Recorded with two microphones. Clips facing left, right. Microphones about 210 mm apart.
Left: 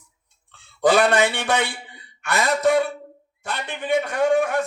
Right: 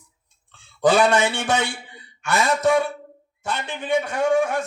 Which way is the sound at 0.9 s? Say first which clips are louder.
Even; 60° left (ahead or behind).